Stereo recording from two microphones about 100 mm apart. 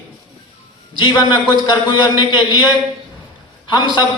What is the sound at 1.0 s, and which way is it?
A man's voice, 50° left (ahead or behind).